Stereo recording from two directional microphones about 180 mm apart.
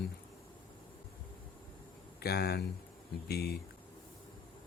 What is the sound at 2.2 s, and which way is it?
Speech, 60° left (ahead or behind).